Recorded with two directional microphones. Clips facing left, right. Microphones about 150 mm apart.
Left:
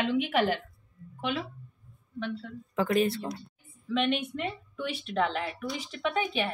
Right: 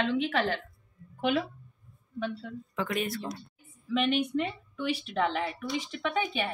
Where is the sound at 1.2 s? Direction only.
45° right (ahead or behind).